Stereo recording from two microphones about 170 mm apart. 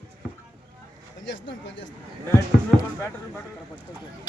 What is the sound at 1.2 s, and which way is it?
Speech, 90° left.